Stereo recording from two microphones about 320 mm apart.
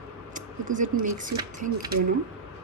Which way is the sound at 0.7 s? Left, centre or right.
Right.